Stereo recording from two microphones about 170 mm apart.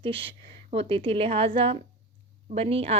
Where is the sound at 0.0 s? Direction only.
30° right (ahead or behind).